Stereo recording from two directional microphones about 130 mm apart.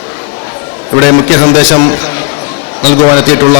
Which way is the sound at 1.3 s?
5° right (ahead or behind).